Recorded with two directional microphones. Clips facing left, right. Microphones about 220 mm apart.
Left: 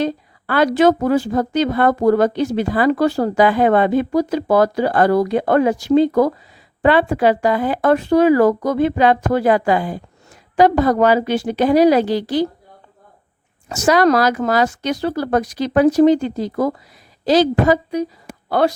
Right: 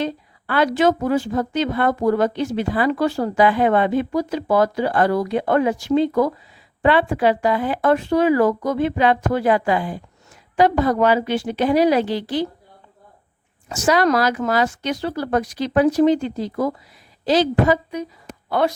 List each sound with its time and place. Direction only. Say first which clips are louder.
0.0 s a woman's voice: left 4 dB; 40° left (ahead or behind)
13.7 s a woman's voice: left 3 dB; 40° left (ahead or behind)